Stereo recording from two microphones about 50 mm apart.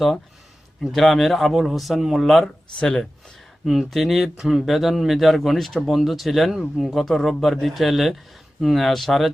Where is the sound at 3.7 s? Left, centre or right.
Centre.